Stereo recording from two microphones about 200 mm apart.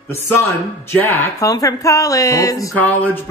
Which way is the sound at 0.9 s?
10° left (ahead or behind).